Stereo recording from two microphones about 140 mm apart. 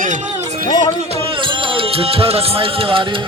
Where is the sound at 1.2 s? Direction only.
35° right (ahead or behind).